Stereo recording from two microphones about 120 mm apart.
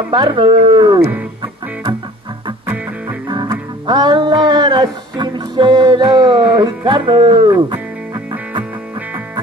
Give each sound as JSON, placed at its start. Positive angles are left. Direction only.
{"t": 0.1, "sound": "speech", "side_deg": -40}
{"t": 3.3, "sound": "music", "side_deg": -40}